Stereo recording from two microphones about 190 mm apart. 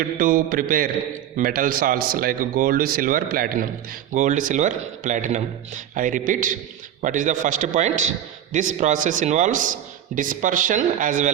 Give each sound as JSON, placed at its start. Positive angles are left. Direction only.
{"t": 0.2, "sound": "a man's voice", "side_deg": -45}